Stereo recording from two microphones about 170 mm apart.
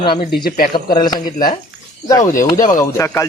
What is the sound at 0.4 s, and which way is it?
Speech, 60° left (ahead or behind).